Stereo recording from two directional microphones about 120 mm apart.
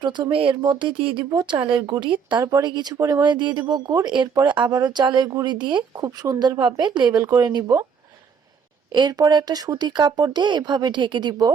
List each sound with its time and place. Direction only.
0.0 s speech: 40° right (ahead or behind)
2.4 s speech: 30° right (ahead or behind)
8.9 s speech: 35° right (ahead or behind)